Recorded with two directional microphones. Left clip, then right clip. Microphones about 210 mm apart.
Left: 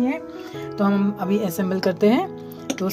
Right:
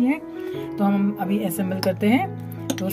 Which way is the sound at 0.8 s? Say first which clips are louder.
Left 2 dB; 10° left (ahead or behind).